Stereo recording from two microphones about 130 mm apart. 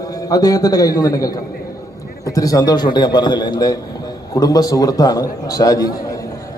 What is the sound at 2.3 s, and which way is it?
A man's voice, 25° left (ahead or behind).